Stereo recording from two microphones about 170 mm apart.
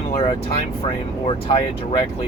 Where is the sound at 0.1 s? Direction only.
35° left (ahead or behind).